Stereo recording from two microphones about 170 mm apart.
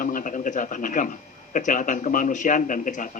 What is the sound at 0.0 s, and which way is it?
A man's voice, 50° left (ahead or behind).